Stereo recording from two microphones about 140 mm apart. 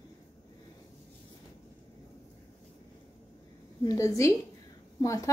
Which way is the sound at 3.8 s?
20° left (ahead or behind).